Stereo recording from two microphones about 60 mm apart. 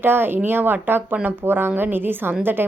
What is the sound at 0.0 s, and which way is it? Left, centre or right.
Speech, right.